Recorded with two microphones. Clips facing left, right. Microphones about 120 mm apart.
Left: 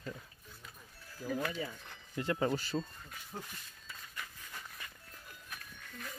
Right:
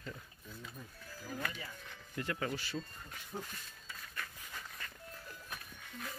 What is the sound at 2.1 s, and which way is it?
Speech, 25° left (ahead or behind).